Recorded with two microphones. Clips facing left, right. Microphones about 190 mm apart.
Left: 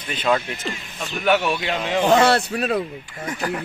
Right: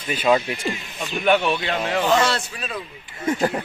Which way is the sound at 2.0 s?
55° left (ahead or behind).